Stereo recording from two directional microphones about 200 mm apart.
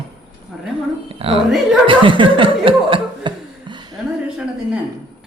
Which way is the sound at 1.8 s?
25° right (ahead or behind).